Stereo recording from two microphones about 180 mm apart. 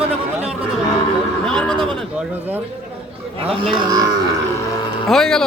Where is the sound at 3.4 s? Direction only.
30° right (ahead or behind).